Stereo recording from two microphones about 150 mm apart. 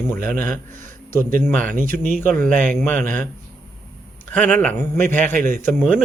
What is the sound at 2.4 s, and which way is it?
Speech, 55° right (ahead or behind).